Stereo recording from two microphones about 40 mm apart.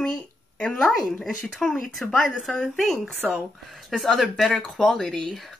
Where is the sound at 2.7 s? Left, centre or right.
Centre.